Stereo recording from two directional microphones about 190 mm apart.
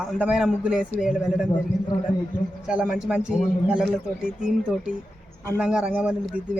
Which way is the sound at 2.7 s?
5° right (ahead or behind).